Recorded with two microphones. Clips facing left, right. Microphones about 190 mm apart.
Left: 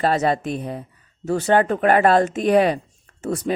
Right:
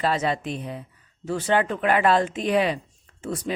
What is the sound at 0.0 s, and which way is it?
Speech, 45° left (ahead or behind).